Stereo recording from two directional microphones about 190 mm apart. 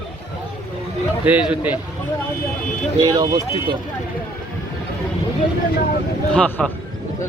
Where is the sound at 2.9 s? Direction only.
20° right (ahead or behind).